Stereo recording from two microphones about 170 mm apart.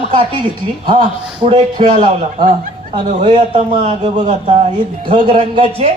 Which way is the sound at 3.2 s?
40° right (ahead or behind).